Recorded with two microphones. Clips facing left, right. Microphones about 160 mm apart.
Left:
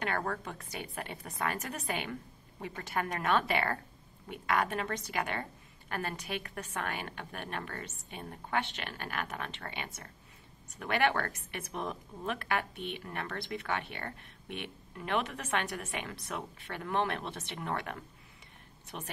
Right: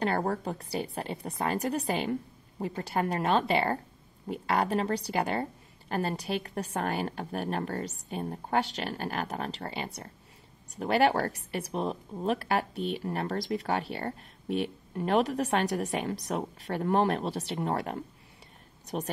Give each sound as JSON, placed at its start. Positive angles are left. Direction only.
{"t": 0.0, "sound": "a woman's voice", "side_deg": -35}